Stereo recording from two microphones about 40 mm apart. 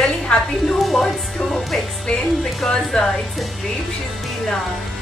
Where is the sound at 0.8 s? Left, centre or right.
Centre.